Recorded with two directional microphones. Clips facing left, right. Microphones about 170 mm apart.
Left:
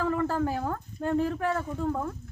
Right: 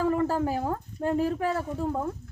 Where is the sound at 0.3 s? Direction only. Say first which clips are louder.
Right 1 dB; 15° right (ahead or behind).